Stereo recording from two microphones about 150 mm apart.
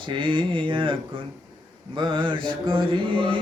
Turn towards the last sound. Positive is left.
turn(degrees=-35)  # may be behind; listen again after turning